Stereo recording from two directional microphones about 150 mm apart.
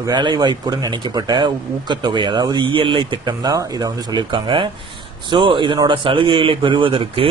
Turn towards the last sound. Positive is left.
turn(degrees=-35)  # may be behind; listen again after turning